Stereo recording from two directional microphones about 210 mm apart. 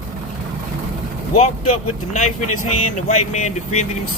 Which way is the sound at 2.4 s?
90° left.